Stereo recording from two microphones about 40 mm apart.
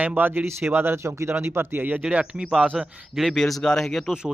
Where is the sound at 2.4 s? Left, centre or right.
Centre.